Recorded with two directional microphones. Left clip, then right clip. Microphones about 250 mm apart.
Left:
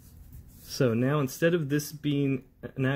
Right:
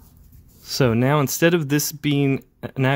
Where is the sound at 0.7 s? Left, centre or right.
Right.